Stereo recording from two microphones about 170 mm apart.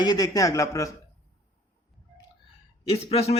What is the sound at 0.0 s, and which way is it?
Speech, 25° left (ahead or behind).